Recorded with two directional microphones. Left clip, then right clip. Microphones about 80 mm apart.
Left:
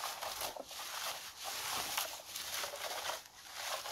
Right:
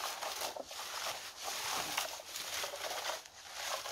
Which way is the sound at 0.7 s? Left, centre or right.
Left.